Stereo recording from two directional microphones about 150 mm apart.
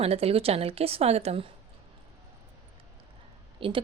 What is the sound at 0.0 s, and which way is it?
Speech, 40° right (ahead or behind).